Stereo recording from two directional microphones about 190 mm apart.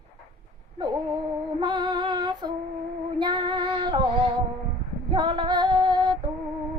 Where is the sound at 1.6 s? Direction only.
25° right (ahead or behind).